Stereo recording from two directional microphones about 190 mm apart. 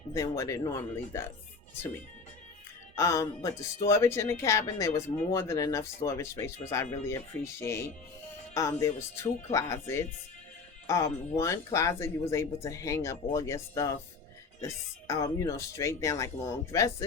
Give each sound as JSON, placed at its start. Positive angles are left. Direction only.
{"t": 0.1, "sound": "speech", "side_deg": 15}
{"t": 2.9, "sound": "speech", "side_deg": 15}